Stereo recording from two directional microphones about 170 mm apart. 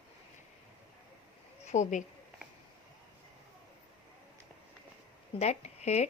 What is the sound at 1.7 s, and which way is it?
Speech, 45° left (ahead or behind).